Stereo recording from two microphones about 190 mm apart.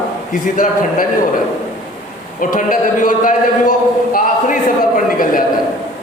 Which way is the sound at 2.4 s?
45° left (ahead or behind).